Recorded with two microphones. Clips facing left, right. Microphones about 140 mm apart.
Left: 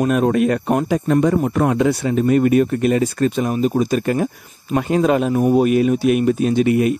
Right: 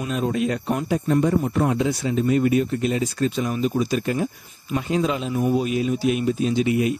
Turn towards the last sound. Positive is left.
turn(degrees=55)  # may be behind; listen again after turning